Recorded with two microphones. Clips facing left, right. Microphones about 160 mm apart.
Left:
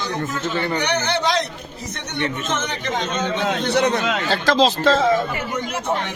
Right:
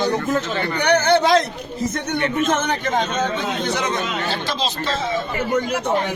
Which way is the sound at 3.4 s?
70° left (ahead or behind).